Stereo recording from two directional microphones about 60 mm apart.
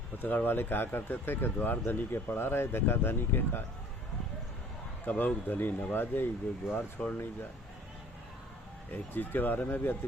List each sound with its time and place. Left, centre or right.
0.2 s speech: left
5.0 s speech: left
8.9 s speech: left